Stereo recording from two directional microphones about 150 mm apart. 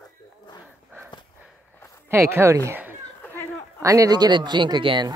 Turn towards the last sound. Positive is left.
turn(degrees=-30)  # may be behind; listen again after turning